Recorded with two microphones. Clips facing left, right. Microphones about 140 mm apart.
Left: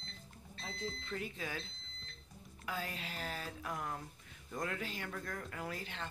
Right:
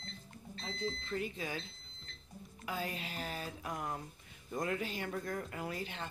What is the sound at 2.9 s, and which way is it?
Speech, 10° right (ahead or behind).